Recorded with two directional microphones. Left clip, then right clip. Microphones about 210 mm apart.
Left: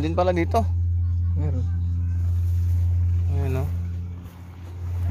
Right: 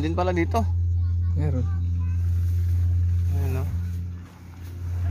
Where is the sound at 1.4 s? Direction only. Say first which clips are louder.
Right 3 dB; 35° right (ahead or behind).